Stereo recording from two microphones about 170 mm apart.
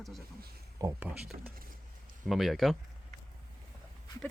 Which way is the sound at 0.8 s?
15° right (ahead or behind).